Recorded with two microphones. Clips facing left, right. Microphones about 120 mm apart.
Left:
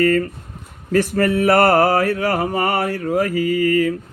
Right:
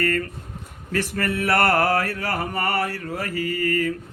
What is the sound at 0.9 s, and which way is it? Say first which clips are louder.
Mantra: left 8 dB; 45° left (ahead or behind).